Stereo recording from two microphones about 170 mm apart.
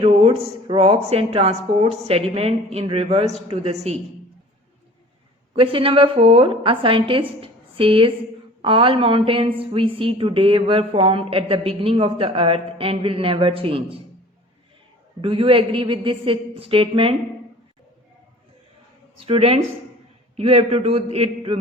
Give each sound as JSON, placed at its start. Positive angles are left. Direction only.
{"t": 0.0, "sound": "speech", "side_deg": -35}
{"t": 5.5, "sound": "speech", "side_deg": -35}
{"t": 15.2, "sound": "speech", "side_deg": -30}
{"t": 19.2, "sound": "speech", "side_deg": -35}